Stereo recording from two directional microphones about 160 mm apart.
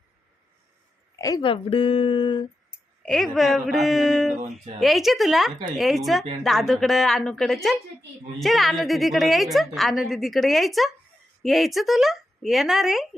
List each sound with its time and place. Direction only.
1.1 s speech: 20° left (ahead or behind)
3.0 s a woman's voice: 5° left (ahead or behind)